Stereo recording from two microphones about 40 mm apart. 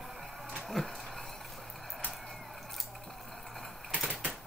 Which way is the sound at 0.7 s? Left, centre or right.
Centre.